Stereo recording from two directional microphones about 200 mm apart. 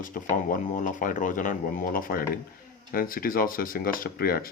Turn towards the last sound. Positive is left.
turn(degrees=50)  # may be behind; listen again after turning